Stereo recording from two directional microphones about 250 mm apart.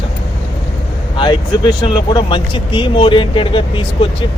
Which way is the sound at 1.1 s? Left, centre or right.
Centre.